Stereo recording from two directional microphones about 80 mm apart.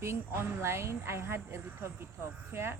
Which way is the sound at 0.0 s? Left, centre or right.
Right.